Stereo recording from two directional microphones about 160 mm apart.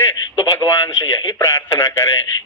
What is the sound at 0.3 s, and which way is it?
Radio, 25° left (ahead or behind).